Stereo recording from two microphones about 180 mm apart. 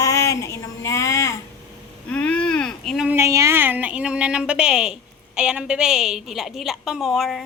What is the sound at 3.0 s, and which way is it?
A woman's voice, 15° right (ahead or behind).